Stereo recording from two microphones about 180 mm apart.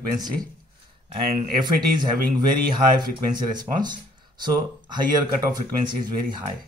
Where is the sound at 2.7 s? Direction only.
25° right (ahead or behind).